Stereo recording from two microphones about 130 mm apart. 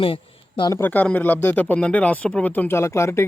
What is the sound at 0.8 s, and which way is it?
Speech, 15° left (ahead or behind).